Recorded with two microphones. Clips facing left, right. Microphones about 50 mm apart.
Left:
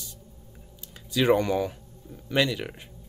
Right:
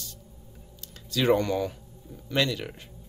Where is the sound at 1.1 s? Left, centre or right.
Centre.